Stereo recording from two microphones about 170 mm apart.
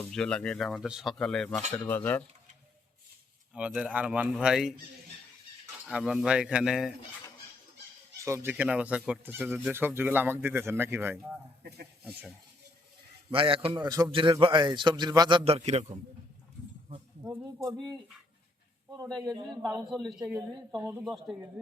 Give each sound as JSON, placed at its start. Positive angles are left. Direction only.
{"t": 0.0, "sound": "speech", "side_deg": 5}
{"t": 3.5, "sound": "speech", "side_deg": -5}
{"t": 5.8, "sound": "speech", "side_deg": 0}
{"t": 8.2, "sound": "speech", "side_deg": -15}
{"t": 13.3, "sound": "a man's voice", "side_deg": -30}
{"t": 17.2, "sound": "a man's voice", "side_deg": -20}
{"t": 19.9, "sound": "speech", "side_deg": 0}
{"t": 21.0, "sound": "speech", "side_deg": -5}